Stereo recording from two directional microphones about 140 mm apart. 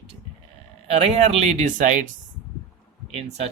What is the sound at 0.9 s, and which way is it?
Speech, 50° right (ahead or behind).